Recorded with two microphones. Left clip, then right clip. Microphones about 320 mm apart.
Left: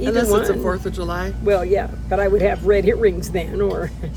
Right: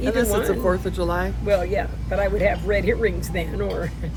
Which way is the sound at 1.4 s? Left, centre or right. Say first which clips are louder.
Left 5 dB; left.